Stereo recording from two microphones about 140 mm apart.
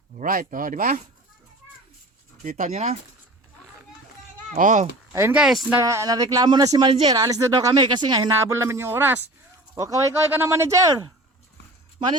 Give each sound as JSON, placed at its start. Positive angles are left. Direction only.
{"t": 0.2, "sound": "speech", "side_deg": -75}
{"t": 2.4, "sound": "speech", "side_deg": -65}
{"t": 4.5, "sound": "speech", "side_deg": -65}
{"t": 5.1, "sound": "speech", "side_deg": -20}
{"t": 5.4, "sound": "speech", "side_deg": 0}
{"t": 5.7, "sound": "speech", "side_deg": -20}
{"t": 8.3, "sound": "a man's voice", "side_deg": -20}